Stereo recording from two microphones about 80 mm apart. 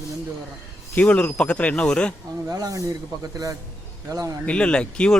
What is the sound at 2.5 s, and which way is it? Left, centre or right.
Speech, right.